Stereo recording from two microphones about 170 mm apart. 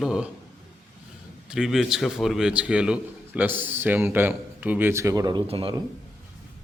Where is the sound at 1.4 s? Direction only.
5° right (ahead or behind); by 5.8 s 35° right (ahead or behind).